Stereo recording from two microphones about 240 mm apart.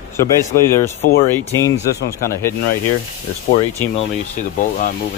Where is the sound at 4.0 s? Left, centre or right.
Left.